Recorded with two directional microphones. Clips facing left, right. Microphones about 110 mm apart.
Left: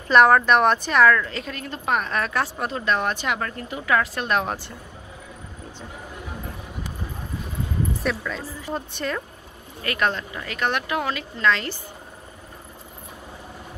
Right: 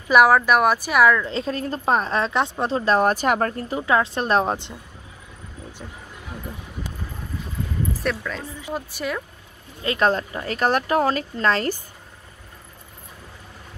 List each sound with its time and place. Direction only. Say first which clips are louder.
0.1 s speech: even; 5° right (ahead or behind)
1.2 s speech: right 6 dB; 30° right (ahead or behind)
7.9 s speech: even; centre (ahead or behind)
9.8 s speech: right 4 dB; 30° right (ahead or behind)